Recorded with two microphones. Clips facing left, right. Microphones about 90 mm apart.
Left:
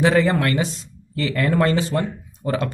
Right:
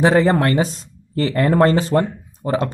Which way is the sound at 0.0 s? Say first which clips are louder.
Right 3 dB; 30° right (ahead or behind).